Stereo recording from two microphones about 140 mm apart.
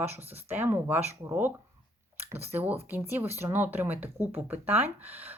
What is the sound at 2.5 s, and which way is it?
Speech, 15° right (ahead or behind).